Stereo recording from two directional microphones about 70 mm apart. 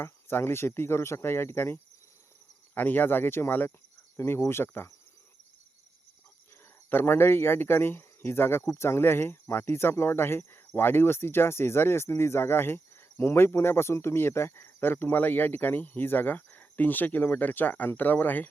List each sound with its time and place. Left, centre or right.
0.0 s speech: left
6.9 s speech: left